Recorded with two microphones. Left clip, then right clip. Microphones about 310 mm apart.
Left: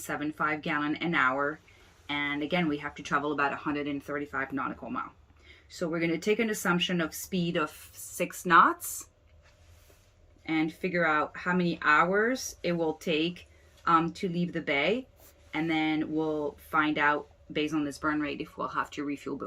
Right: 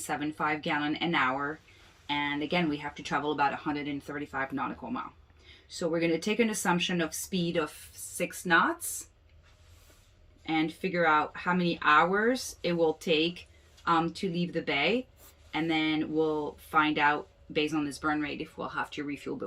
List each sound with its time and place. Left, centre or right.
0.2 s speech: centre
10.4 s speech: centre
11.5 s speech: centre
11.8 s speech: centre